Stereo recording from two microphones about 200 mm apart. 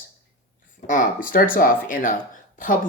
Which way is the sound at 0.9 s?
40° left (ahead or behind).